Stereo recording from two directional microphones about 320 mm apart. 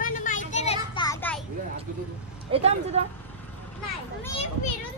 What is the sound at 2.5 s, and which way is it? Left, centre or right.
Speech, centre.